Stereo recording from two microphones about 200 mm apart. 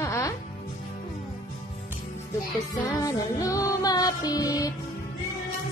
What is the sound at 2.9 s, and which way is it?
Music, 15° left (ahead or behind).